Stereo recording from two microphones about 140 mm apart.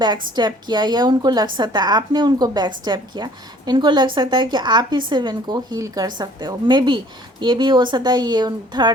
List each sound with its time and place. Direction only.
0.3 s a woman's voice: 30° right (ahead or behind)